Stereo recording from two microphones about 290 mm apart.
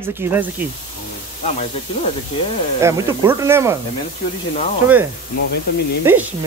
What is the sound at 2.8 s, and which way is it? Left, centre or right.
Speech, centre.